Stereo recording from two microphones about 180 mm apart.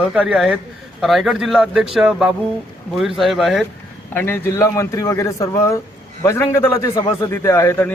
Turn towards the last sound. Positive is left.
turn(degrees=15)  # may be behind; listen again after turning